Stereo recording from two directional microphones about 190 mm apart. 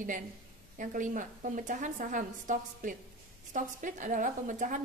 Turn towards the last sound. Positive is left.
turn(degrees=-40)  # may be behind; listen again after turning